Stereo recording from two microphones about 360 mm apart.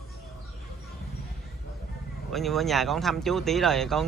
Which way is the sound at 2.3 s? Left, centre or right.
Centre.